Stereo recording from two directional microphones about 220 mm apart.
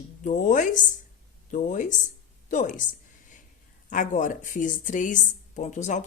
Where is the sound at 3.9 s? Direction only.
35° left (ahead or behind).